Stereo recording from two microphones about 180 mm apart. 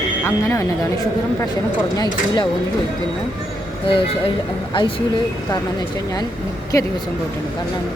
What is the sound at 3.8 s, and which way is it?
Speech, 30° left (ahead or behind).